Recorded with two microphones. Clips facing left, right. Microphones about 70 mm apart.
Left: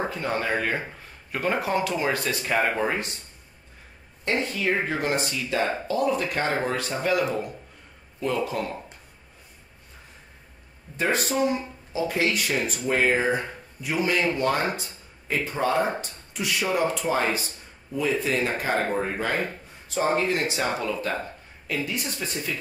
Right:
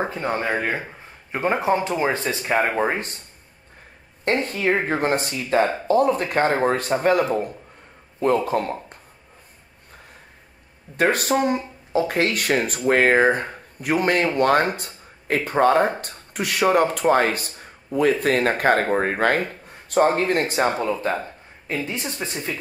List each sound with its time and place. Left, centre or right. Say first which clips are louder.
0.0 s speech: right 3 dB; right
4.2 s speech: right 4 dB; right
11.0 s speech: right 4 dB; right